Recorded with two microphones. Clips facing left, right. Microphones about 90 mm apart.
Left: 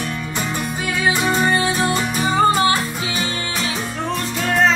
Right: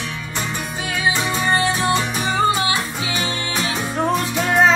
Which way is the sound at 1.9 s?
40° left (ahead or behind).